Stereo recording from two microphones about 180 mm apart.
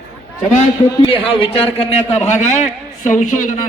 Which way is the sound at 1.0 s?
30° left (ahead or behind).